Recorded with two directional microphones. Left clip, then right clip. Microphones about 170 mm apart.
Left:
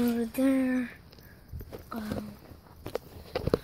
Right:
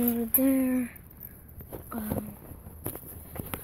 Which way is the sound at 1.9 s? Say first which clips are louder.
Right 1 dB; 5° left (ahead or behind).